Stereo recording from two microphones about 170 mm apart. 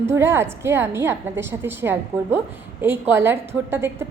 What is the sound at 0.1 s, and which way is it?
A woman's voice, 15° right (ahead or behind).